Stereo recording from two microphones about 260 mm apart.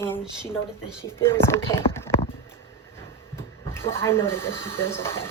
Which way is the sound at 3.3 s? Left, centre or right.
Centre.